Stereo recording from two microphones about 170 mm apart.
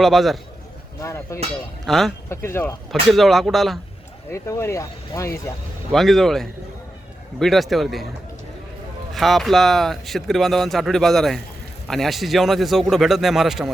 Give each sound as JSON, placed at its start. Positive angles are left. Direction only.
{"t": 0.0, "sound": "speech", "side_deg": 0}
{"t": 1.0, "sound": "speech", "side_deg": 15}
{"t": 1.9, "sound": "speech", "side_deg": 0}
{"t": 2.3, "sound": "speech", "side_deg": 15}
{"t": 2.9, "sound": "speech", "side_deg": 0}
{"t": 4.3, "sound": "speech", "side_deg": 15}
{"t": 5.9, "sound": "speech", "side_deg": 0}
{"t": 9.1, "sound": "speech", "side_deg": 0}